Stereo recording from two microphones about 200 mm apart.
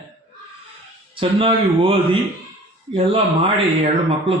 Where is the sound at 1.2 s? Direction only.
25° right (ahead or behind).